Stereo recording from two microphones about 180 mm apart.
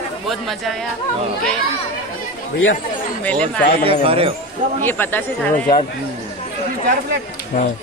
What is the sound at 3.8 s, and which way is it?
Speech, 30° right (ahead or behind).